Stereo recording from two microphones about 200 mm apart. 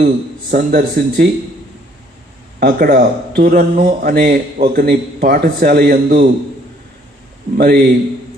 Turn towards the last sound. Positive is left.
turn(degrees=-50)  # may be behind; listen again after turning